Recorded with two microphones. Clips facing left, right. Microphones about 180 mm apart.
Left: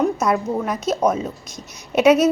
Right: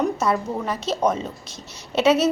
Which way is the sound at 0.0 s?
10° left (ahead or behind).